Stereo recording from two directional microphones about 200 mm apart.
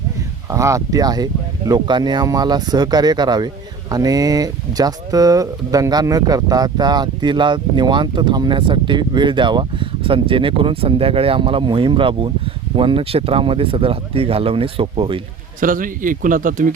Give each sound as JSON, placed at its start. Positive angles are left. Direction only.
{"t": 0.5, "sound": "speech", "side_deg": -15}
{"t": 15.6, "sound": "speech", "side_deg": -40}